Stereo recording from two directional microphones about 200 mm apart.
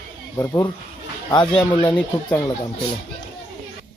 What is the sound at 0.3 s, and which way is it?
Speech, 15° left (ahead or behind).